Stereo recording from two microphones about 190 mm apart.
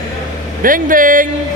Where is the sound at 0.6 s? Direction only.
45° right (ahead or behind).